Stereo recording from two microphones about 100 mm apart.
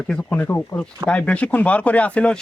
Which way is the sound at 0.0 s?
10° left (ahead or behind).